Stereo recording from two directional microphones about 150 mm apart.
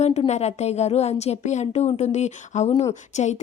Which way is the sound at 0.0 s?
45° left (ahead or behind).